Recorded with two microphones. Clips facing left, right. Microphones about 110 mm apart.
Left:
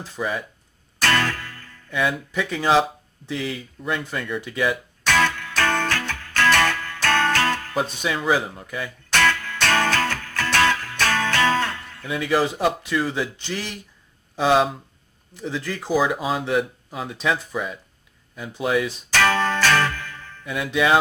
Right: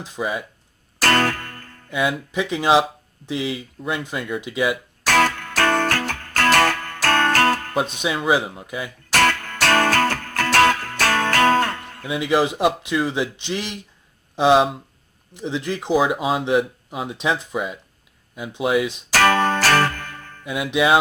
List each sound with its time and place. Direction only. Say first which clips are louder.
0.0 s speech: right 1 dB; 15° right (ahead or behind)
1.0 s music: right 3 dB; 45° right (ahead or behind)
1.9 s speech: right 1 dB; 15° right (ahead or behind)
5.0 s music: right 3 dB; 45° right (ahead or behind)
7.8 s speech: right 2 dB; 15° right (ahead or behind)
9.1 s music: right 2 dB; 50° right (ahead or behind)
12.0 s speech: right 2 dB; 15° right (ahead or behind)
19.1 s music: right 3 dB; 50° right (ahead or behind)
20.4 s speech: right 2 dB; 15° right (ahead or behind)